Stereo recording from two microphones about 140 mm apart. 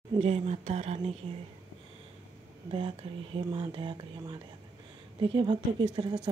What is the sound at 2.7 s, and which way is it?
A woman's voice, 40° right (ahead or behind).